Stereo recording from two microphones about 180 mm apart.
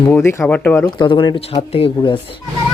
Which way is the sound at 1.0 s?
25° left (ahead or behind).